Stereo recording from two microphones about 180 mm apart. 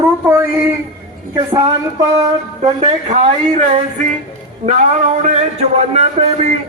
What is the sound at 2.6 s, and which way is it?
Speech, 35° right (ahead or behind).